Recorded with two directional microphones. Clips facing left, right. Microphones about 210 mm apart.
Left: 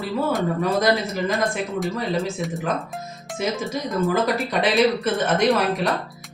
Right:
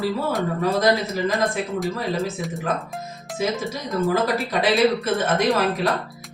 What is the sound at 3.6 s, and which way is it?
A man's voice, centre (ahead or behind).